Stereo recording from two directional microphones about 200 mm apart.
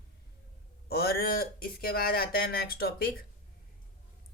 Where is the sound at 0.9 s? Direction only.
50° left (ahead or behind).